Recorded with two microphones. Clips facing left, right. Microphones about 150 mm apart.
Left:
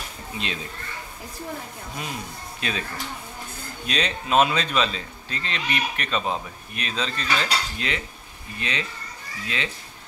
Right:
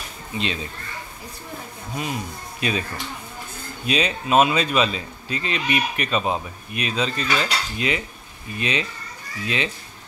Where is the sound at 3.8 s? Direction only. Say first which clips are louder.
Right 4 dB; 5° right (ahead or behind).